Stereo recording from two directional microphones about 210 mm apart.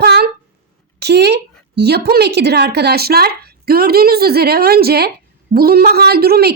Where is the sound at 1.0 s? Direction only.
50° right (ahead or behind).